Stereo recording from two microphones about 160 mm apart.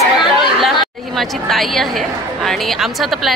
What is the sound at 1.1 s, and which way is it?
A woman's voice, centre (ahead or behind).